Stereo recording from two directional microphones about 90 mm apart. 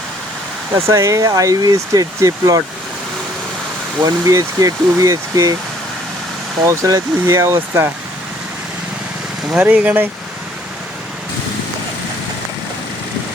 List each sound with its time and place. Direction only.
0.7 s speech: 30° right (ahead or behind)
4.0 s speech: 40° right (ahead or behind)
6.7 s speech: 35° right (ahead or behind)
9.5 s speech: 15° right (ahead or behind)